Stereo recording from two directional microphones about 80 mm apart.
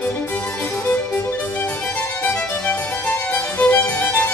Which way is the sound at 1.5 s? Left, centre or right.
Centre.